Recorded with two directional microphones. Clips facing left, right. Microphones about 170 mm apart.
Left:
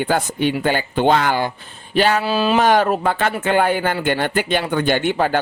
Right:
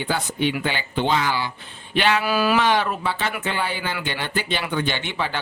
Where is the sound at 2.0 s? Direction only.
40° left (ahead or behind).